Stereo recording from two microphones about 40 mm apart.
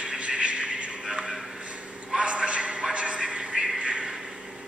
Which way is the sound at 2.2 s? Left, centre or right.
Right.